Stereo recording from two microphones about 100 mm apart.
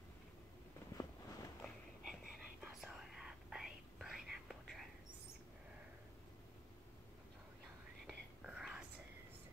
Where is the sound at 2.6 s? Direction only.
5° right (ahead or behind).